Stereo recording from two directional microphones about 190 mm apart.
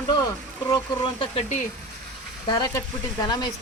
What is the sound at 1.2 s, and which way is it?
Speech, 35° left (ahead or behind).